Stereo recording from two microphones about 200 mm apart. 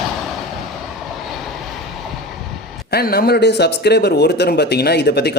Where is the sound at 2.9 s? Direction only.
50° left (ahead or behind).